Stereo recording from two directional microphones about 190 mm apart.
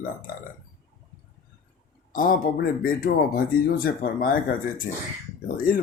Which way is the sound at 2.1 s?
45° left (ahead or behind).